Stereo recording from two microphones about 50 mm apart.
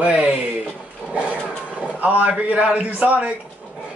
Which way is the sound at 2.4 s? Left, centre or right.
Right.